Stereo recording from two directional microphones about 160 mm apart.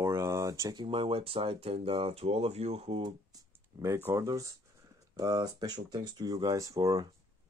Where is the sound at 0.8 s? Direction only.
35° right (ahead or behind).